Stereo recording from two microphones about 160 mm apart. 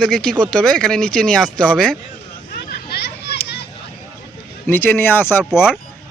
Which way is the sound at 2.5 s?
90° left.